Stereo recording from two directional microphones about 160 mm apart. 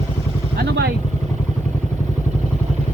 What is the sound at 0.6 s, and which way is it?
Vehicle, 90° right.